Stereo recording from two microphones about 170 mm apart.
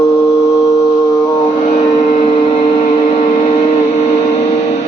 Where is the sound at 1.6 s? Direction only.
45° left (ahead or behind).